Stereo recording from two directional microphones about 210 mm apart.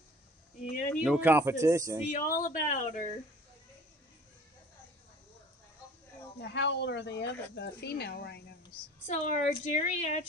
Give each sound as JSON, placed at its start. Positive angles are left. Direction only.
{"t": 0.6, "sound": "a sound", "side_deg": 40}
{"t": 0.9, "sound": "speech", "side_deg": -5}
{"t": 2.0, "sound": "speech", "side_deg": 40}
{"t": 6.4, "sound": "speech", "side_deg": 55}
{"t": 9.0, "sound": "a woman's voice", "side_deg": 35}